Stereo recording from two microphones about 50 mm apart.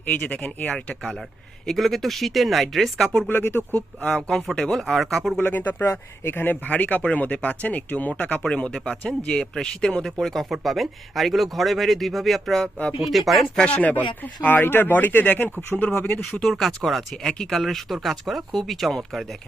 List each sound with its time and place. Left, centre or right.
0.3 s speech: left
1.6 s speech: centre
3.2 s speech: left
4.1 s speech: centre
5.4 s speech: left
8.4 s speech: centre
13.7 s speech: left
16.1 s speech: centre